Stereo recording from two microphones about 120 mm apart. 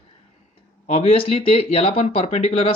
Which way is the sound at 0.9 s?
60° left (ahead or behind).